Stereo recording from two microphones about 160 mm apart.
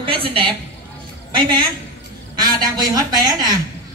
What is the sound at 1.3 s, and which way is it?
A woman's voice, 30° right (ahead or behind).